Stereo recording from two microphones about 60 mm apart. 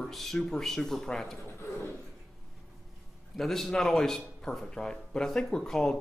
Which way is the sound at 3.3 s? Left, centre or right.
Centre.